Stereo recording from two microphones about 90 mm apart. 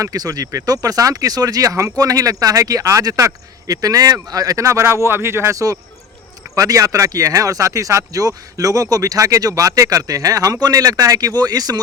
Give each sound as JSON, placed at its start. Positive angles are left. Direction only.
{"t": 0.0, "sound": "speech", "side_deg": -40}